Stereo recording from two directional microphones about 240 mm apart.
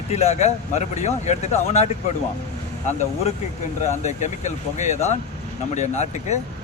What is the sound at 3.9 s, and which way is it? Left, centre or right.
Speech, left.